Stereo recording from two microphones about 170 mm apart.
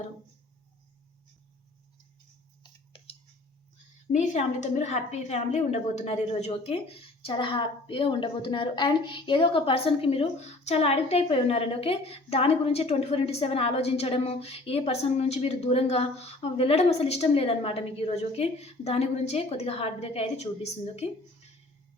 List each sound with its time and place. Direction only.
2.6 s clicking: 30° left (ahead or behind)
4.1 s a woman's voice: 45° left (ahead or behind)